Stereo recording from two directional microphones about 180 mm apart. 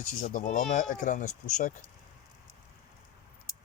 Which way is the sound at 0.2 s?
45° left (ahead or behind).